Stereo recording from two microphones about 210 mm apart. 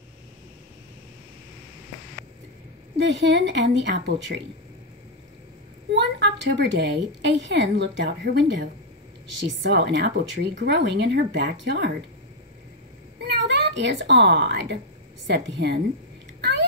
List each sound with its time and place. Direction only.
3.0 s a woman's voice: 60° right (ahead or behind)
5.9 s a woman's voice: 55° right (ahead or behind)
13.2 s a woman's voice: 55° right (ahead or behind)